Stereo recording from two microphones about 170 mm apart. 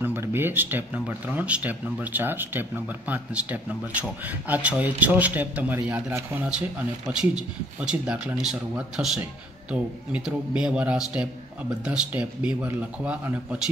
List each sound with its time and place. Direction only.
0.0 s speech: 10° right (ahead or behind)